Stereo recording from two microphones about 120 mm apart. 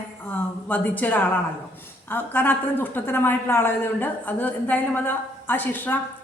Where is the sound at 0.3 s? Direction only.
15° left (ahead or behind).